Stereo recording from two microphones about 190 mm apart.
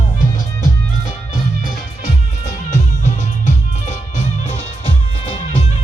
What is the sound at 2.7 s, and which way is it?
Music, 40° left (ahead or behind).